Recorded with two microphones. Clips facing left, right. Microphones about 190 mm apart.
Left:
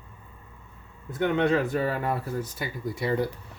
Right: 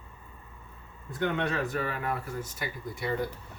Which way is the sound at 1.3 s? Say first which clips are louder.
Left 7 dB; 25° left (ahead or behind).